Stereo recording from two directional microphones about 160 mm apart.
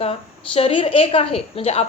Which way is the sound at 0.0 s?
35° left (ahead or behind).